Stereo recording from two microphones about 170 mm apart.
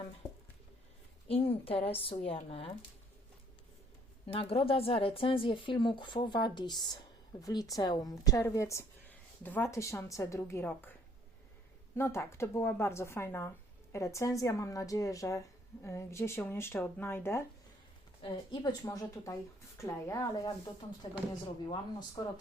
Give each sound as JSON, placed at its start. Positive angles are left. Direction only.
{"t": 1.3, "sound": "a woman's voice", "side_deg": 35}
{"t": 4.3, "sound": "a woman's voice", "side_deg": 35}
{"t": 11.9, "sound": "a woman's voice", "side_deg": 15}
{"t": 18.2, "sound": "speech", "side_deg": 25}
{"t": 21.7, "sound": "speech", "side_deg": 25}